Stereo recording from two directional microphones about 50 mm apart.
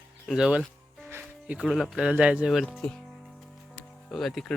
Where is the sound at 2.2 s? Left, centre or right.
Right.